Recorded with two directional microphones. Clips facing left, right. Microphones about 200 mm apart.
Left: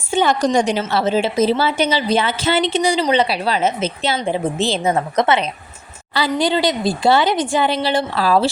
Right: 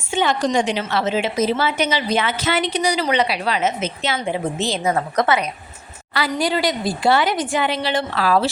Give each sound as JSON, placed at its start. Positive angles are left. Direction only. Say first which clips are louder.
{"t": 0.1, "sound": "a woman's voice", "louder": "left 3 dB", "side_deg": 40}